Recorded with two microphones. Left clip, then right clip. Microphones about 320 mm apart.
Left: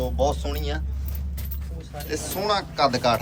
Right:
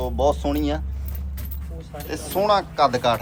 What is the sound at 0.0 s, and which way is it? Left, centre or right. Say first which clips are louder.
Speech: right 3 dB; centre.